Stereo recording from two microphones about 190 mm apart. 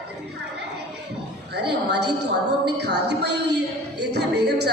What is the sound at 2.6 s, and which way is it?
A woman's voice, 60° right (ahead or behind).